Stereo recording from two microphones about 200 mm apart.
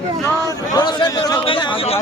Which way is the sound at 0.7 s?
20° left (ahead or behind).